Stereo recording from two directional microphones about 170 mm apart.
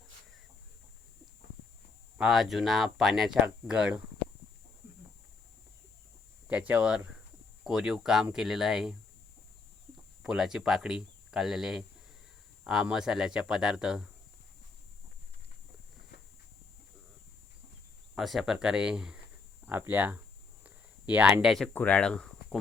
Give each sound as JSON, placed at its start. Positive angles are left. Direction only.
{"t": 2.1, "sound": "speech", "side_deg": 0}
{"t": 6.5, "sound": "speech", "side_deg": -10}
{"t": 10.2, "sound": "speech", "side_deg": -5}
{"t": 18.1, "sound": "speech", "side_deg": 0}
{"t": 20.7, "sound": "a sound", "side_deg": -10}
{"t": 21.7, "sound": "speech", "side_deg": 10}